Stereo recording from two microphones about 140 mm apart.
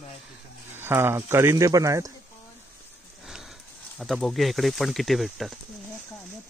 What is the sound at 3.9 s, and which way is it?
Speech, centre (ahead or behind).